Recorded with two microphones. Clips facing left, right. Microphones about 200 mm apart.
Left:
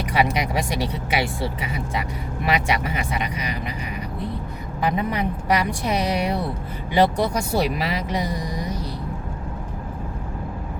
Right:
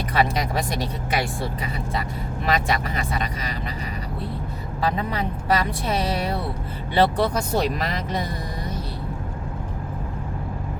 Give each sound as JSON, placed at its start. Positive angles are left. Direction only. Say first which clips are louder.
{"t": 0.1, "sound": "speech", "louder": "left 1 dB", "side_deg": 15}
{"t": 4.8, "sound": "speech", "louder": "left 2 dB", "side_deg": 15}